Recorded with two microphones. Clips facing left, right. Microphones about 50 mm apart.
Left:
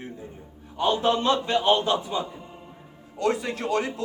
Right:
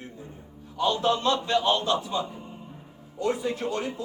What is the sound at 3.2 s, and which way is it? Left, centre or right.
Speech, left.